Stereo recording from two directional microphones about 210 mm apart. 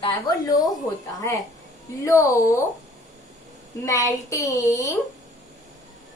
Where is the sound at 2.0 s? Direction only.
15° left (ahead or behind).